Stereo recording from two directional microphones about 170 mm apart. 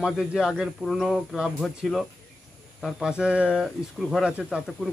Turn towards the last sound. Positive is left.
turn(degrees=0)  # may be behind; listen again after turning